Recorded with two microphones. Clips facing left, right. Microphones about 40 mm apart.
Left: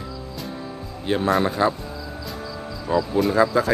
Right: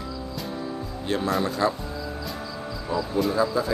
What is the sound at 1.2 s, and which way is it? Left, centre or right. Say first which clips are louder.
Speech: left 5 dB; left.